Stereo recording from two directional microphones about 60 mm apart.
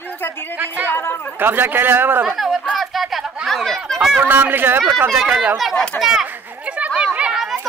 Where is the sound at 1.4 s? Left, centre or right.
Right.